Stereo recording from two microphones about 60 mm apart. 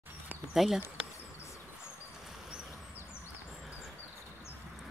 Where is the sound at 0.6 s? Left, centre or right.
Centre.